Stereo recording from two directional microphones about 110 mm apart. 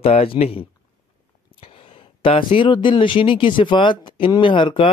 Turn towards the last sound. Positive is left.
turn(degrees=50)  # may be behind; listen again after turning